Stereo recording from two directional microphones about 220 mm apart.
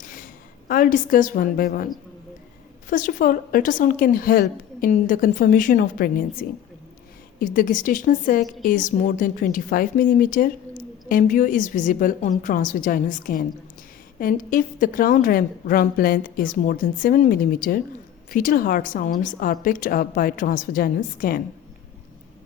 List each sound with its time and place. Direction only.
0.0 s a sound: 35° left (ahead or behind)
0.7 s a woman's voice: 40° left (ahead or behind)
2.9 s a woman's voice: 40° left (ahead or behind)